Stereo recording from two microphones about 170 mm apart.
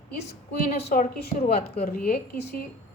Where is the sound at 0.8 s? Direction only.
65° left (ahead or behind).